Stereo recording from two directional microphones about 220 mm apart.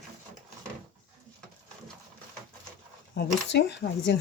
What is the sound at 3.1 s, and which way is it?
Speech, 50° left (ahead or behind).